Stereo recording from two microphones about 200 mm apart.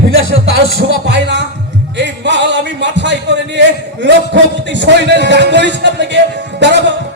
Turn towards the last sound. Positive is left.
turn(degrees=-60)  # may be behind; listen again after turning